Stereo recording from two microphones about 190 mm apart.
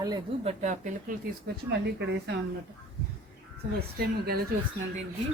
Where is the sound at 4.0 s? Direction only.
55° right (ahead or behind).